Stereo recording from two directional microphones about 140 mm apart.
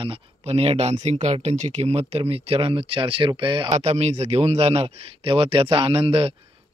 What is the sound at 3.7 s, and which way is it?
Speech, 50° right (ahead or behind).